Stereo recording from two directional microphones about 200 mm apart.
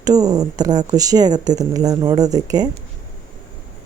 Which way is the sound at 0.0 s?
20° right (ahead or behind).